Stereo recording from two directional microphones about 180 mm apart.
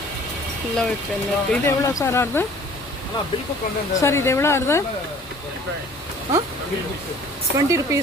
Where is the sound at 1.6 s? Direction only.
15° left (ahead or behind).